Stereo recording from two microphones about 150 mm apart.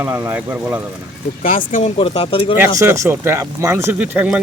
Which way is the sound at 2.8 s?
20° right (ahead or behind).